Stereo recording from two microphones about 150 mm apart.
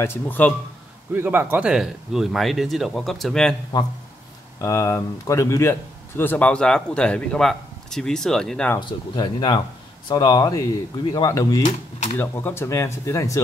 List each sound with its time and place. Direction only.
0.0 s speech: 15° left (ahead or behind)
1.1 s speech: 15° right (ahead or behind); by 3.5 s 5° left (ahead or behind)
4.6 s speech: 20° left (ahead or behind); by 8.7 s 5° left (ahead or behind)
8.7 s speech: 30° left (ahead or behind)
11.6 s speech: 50° left (ahead or behind)
12.2 s speech: 15° left (ahead or behind)